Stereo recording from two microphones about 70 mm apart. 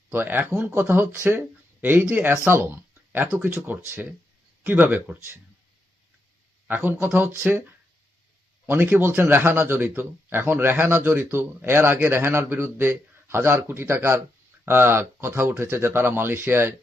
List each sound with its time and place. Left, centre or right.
0.1 s a man's voice: right
2.5 s a sound: right
3.3 s speech: right
6.7 s speech: right
8.6 s a man's voice: right